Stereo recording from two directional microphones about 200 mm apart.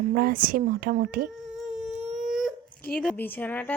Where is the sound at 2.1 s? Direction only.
Centre (ahead or behind).